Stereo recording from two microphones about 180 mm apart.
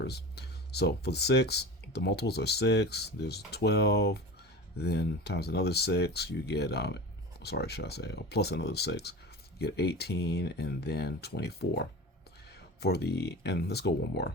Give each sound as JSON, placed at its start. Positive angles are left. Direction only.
{"t": 0.0, "sound": "speech", "side_deg": 65}